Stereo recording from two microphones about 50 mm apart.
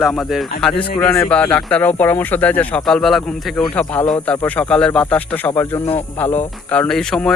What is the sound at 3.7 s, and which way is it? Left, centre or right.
Speech, left.